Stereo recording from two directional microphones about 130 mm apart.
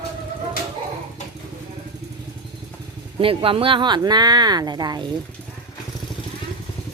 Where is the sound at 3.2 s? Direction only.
45° right (ahead or behind).